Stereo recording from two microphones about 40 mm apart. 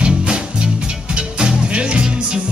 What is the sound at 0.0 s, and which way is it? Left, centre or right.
Music, right.